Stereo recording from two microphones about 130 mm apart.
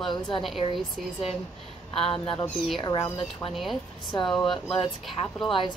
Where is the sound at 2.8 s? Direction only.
35° left (ahead or behind).